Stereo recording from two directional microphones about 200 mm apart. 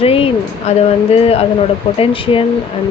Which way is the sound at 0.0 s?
30° left (ahead or behind).